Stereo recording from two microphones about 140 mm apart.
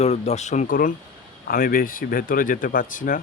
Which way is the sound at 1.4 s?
90° left.